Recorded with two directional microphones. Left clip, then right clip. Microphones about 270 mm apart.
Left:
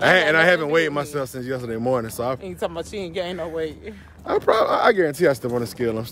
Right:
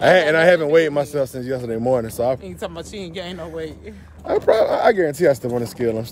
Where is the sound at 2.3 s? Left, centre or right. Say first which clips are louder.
Left 3 dB; centre.